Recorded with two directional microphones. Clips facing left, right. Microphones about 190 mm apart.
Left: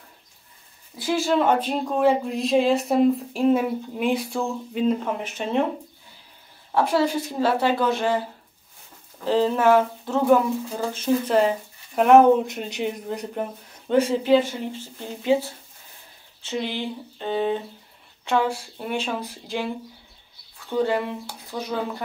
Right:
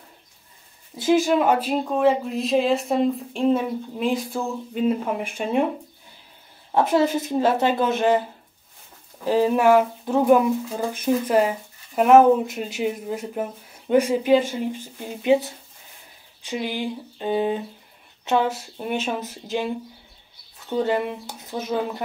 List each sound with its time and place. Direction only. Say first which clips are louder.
0.9 s speech: right 3 dB; 20° right (ahead or behind)
6.7 s speech: right 2 dB; 20° right (ahead or behind)
9.2 s speech: right 1 dB; 10° right (ahead or behind)